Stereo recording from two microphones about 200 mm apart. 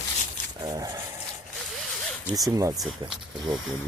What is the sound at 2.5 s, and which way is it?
Speech, 15° right (ahead or behind).